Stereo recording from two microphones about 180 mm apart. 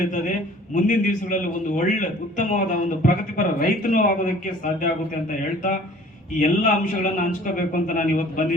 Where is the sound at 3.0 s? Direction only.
45° left (ahead or behind).